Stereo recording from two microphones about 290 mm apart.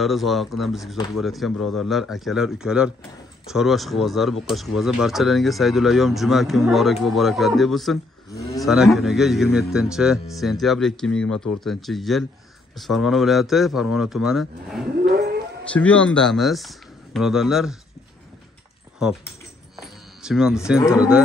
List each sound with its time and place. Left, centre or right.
0.0 s speech: centre
15.0 s howl: right
15.7 s speech: centre
19.8 s music: centre
20.9 s speech: centre